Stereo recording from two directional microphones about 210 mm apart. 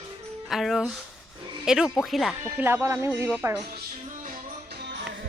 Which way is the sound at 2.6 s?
10° right (ahead or behind).